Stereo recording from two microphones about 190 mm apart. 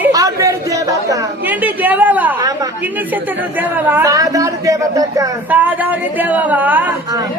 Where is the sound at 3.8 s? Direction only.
10° right (ahead or behind).